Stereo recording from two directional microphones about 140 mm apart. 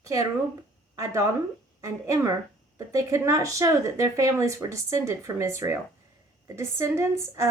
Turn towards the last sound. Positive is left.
turn(degrees=-20)  # may be behind; listen again after turning